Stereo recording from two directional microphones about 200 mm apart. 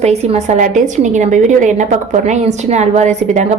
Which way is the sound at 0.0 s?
35° right (ahead or behind).